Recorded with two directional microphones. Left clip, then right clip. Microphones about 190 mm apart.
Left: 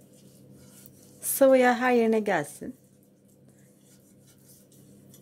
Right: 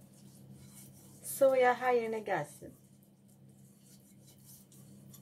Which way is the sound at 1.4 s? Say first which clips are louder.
Left 7 dB; 60° left (ahead or behind).